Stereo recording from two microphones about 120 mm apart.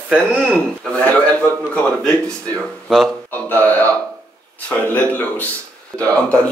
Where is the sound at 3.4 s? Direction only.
15° left (ahead or behind).